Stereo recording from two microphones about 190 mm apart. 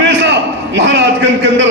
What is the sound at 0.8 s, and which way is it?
Speech, 70° right (ahead or behind).